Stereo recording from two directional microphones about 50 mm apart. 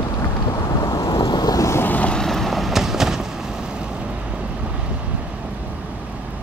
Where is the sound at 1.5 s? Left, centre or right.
Left.